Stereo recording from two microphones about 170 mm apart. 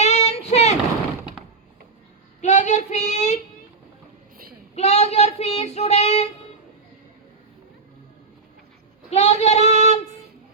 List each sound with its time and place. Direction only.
0.0 s child singing: 40° left (ahead or behind)
2.4 s child singing: 45° left (ahead or behind)
4.7 s child singing: 40° left (ahead or behind)
9.0 s child singing: 40° left (ahead or behind)